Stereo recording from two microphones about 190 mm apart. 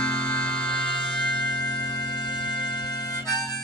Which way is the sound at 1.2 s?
25° left (ahead or behind).